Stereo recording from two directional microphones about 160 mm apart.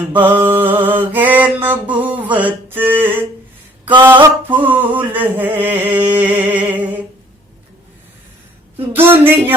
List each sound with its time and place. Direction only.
0.0 s mantra: 10° right (ahead or behind)
9.0 s mantra: 15° right (ahead or behind)